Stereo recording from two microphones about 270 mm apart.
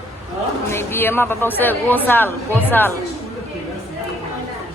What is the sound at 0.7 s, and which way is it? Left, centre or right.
A woman's voice, centre.